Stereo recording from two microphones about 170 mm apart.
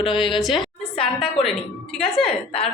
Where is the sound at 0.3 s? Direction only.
Centre (ahead or behind).